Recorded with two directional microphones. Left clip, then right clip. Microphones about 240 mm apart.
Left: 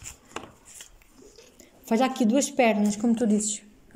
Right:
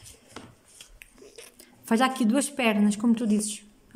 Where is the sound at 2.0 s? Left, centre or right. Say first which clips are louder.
Left 1 dB; right.